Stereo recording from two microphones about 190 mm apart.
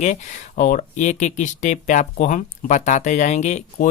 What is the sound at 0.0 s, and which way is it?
Speech, 40° left (ahead or behind).